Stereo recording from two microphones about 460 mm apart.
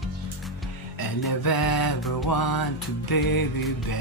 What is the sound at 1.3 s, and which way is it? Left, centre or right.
Music, left.